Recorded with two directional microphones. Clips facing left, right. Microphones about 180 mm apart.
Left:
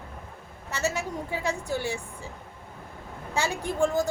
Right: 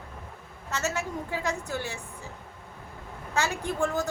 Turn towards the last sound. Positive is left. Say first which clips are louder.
# left 3 dB
turn(degrees=15)  # may be behind; listen again after turning